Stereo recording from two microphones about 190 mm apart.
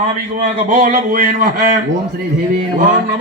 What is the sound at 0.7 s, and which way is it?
Speech, 45° right (ahead or behind).